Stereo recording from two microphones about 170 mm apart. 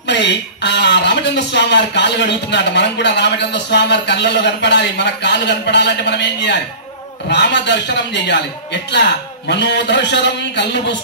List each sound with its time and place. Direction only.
0.0 s speech: 90° left